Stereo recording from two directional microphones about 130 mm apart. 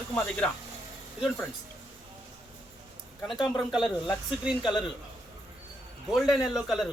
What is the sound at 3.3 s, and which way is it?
Speech, 35° left (ahead or behind).